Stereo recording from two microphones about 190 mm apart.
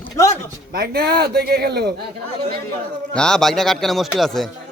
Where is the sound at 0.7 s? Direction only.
55° right (ahead or behind).